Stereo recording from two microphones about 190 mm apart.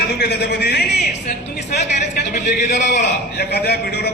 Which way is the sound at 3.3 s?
60° left (ahead or behind).